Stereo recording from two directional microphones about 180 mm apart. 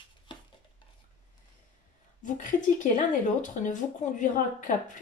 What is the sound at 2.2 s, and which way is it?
Speech, 45° left (ahead or behind).